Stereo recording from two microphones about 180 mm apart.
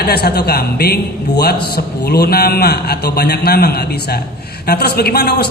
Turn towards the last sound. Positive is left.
turn(degrees=65)  # may be behind; listen again after turning